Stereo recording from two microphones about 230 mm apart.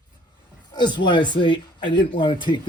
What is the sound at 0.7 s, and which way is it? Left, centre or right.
A man's voice, centre.